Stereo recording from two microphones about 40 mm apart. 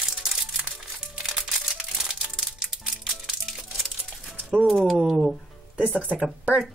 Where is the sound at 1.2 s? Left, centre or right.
Centre.